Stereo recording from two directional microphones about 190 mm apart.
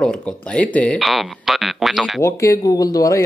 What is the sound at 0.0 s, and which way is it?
Speech, 5° left (ahead or behind).